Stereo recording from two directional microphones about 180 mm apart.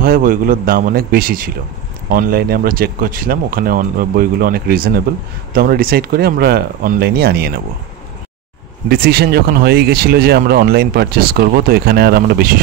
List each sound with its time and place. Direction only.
0.0 s a man's voice: 50° right (ahead or behind)
8.8 s speech: 60° right (ahead or behind)